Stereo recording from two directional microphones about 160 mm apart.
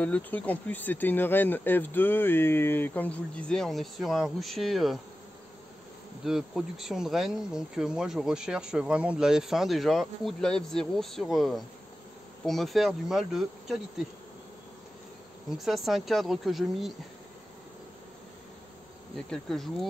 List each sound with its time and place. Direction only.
0.0 s speech: 10° left (ahead or behind)
6.2 s speech: centre (ahead or behind)
15.5 s speech: centre (ahead or behind)
19.3 s speech: 5° left (ahead or behind)